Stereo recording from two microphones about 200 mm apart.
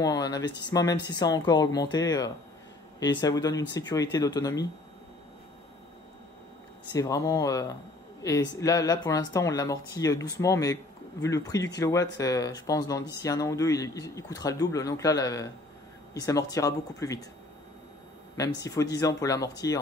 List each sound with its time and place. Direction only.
0.0 s speech: 20° left (ahead or behind)
6.9 s speech: 15° left (ahead or behind)
18.4 s speech: 15° left (ahead or behind)